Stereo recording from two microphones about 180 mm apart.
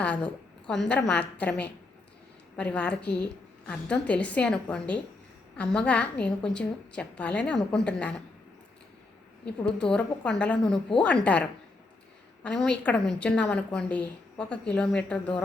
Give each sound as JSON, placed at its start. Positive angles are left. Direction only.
{"t": 0.0, "sound": "a woman's voice", "side_deg": 5}
{"t": 9.6, "sound": "a woman's voice", "side_deg": 5}
{"t": 12.5, "sound": "a woman's voice", "side_deg": 5}